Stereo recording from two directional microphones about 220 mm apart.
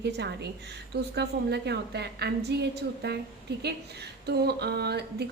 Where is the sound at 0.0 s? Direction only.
50° right (ahead or behind).